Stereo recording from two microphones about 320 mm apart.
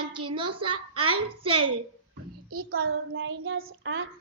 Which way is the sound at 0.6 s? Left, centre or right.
Right.